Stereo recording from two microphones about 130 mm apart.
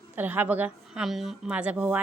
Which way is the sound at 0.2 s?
15° right (ahead or behind).